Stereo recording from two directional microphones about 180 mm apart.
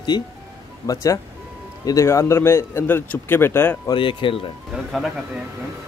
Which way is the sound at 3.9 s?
30° left (ahead or behind).